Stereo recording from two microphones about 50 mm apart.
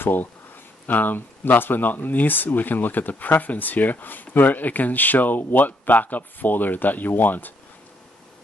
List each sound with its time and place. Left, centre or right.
0.0 s speech: left